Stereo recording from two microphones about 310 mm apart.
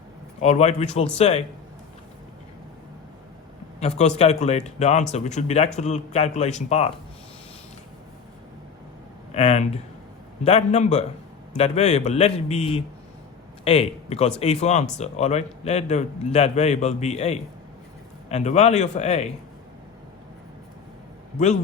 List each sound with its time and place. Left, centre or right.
0.3 s a man's voice: left
3.8 s a man's voice: left
9.3 s a man's voice: left
21.3 s a man's voice: left